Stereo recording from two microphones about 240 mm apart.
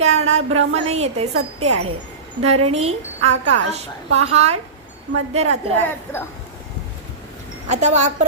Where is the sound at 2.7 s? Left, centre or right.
Right.